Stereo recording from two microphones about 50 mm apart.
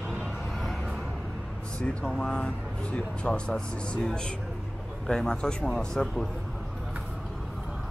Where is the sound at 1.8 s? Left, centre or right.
Left.